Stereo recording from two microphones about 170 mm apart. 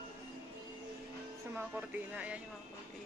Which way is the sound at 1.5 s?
10° right (ahead or behind).